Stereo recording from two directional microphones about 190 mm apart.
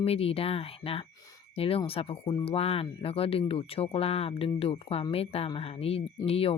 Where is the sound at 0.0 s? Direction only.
30° left (ahead or behind).